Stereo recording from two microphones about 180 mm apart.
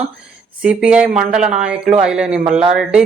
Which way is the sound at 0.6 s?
5° right (ahead or behind).